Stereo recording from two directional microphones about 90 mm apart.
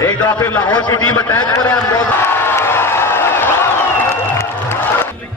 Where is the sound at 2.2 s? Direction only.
25° left (ahead or behind).